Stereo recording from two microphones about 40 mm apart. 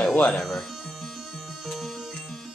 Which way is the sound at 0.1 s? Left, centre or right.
Left.